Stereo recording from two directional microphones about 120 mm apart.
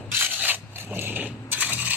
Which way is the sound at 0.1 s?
15° right (ahead or behind).